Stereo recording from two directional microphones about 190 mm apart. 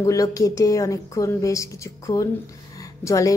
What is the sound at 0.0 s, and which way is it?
Speech, 15° left (ahead or behind).